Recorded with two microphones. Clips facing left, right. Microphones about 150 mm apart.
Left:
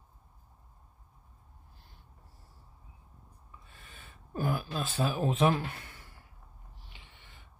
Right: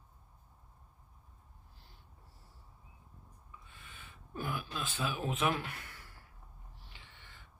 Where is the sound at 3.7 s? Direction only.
40° left (ahead or behind); by 6.1 s 25° left (ahead or behind).